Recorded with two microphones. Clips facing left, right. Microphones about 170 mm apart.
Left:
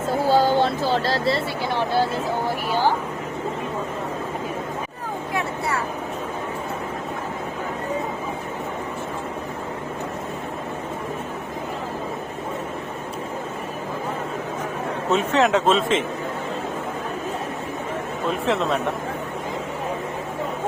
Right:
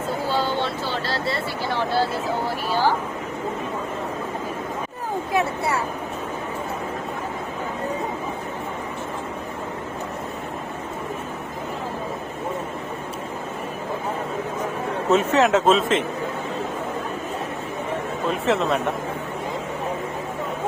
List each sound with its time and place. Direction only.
0.3 s a sound: 45° left (ahead or behind)
1.7 s speech: 15° left (ahead or behind)
5.3 s speech: 25° right (ahead or behind)
15.1 s a man's voice: centre (ahead or behind)
18.3 s a man's voice: centre (ahead or behind)